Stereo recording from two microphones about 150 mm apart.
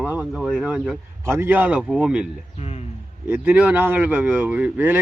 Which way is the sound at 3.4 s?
10° right (ahead or behind).